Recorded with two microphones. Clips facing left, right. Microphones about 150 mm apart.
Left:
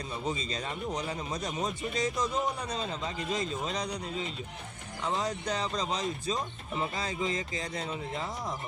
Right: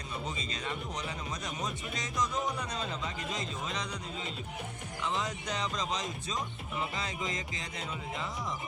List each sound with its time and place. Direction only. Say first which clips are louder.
0.3 s speech: left 5 dB; 35° left (ahead or behind)
5.1 s speech: left 5 dB; 35° left (ahead or behind)